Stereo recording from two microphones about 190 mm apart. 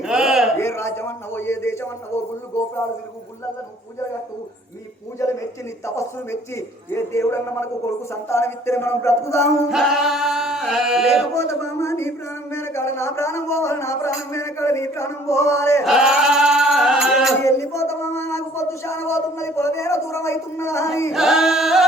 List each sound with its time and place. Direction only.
0.0 s a sound: centre (ahead or behind)
0.5 s speech: 15° left (ahead or behind)
5.2 s speech: 15° left (ahead or behind)
9.6 s chant: centre (ahead or behind)
11.3 s speech: 15° left (ahead or behind)
15.8 s chant: centre (ahead or behind)
17.4 s speech: 15° left (ahead or behind)
21.1 s chant: centre (ahead or behind)